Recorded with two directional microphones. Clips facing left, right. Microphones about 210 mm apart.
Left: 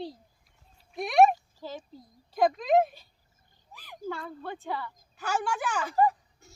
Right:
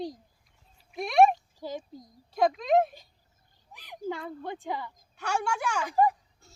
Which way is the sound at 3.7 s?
15° right (ahead or behind).